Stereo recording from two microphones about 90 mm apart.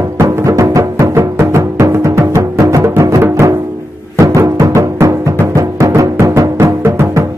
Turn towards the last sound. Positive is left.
turn(degrees=-35)  # may be behind; listen again after turning